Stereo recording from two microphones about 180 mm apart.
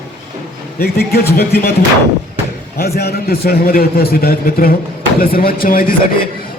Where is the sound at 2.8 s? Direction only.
60° left (ahead or behind).